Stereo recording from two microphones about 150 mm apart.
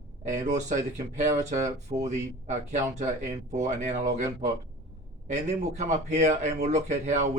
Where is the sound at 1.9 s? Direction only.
50° right (ahead or behind).